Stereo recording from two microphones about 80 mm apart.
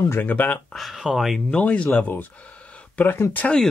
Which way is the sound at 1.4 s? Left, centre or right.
Centre.